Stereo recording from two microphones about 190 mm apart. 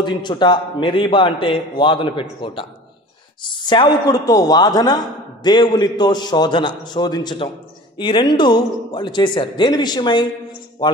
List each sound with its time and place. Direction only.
0.0 s a woman's voice: 25° left (ahead or behind)